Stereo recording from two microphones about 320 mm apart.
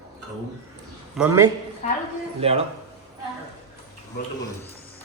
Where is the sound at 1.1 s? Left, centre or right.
Centre.